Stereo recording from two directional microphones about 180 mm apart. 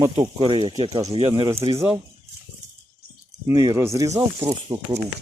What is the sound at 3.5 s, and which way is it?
Speech, 20° right (ahead or behind).